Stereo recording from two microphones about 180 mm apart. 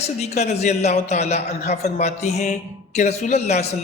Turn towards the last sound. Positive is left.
turn(degrees=40)  # may be behind; listen again after turning